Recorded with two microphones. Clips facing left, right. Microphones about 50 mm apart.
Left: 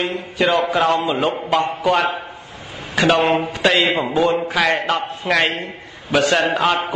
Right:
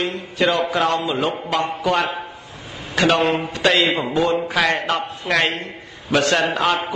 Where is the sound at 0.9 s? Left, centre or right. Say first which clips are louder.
Left 2 dB; centre.